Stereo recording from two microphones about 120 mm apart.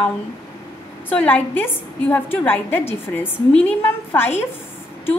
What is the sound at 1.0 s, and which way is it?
A woman's voice, 10° left (ahead or behind).